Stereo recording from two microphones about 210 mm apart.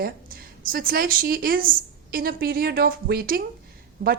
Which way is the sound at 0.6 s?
45° right (ahead or behind).